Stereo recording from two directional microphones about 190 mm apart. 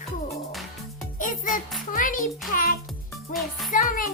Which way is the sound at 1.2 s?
45° left (ahead or behind).